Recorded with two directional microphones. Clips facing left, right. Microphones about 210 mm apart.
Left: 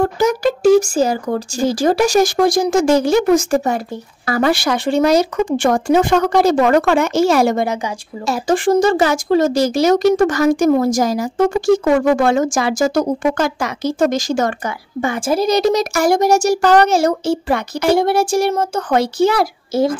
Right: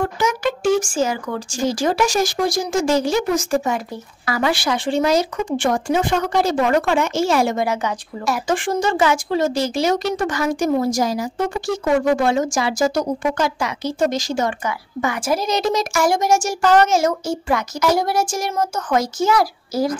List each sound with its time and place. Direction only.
0.0 s speech: 35° left (ahead or behind)
2.3 s speech: 70° left (ahead or behind)
7.2 s speech: 40° left (ahead or behind)
15.0 s a woman's voice: 30° left (ahead or behind)